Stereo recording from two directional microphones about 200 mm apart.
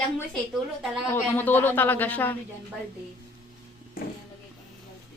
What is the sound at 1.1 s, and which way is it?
A man's voice, 10° left (ahead or behind).